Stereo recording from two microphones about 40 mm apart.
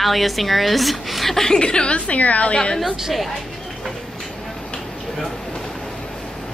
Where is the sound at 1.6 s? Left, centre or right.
Left.